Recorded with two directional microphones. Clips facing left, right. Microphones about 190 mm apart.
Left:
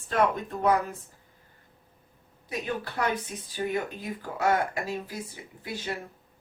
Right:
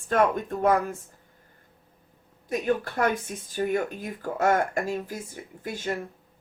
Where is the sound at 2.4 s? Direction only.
50° right (ahead or behind).